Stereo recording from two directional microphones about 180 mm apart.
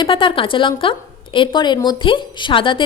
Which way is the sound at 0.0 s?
30° left (ahead or behind).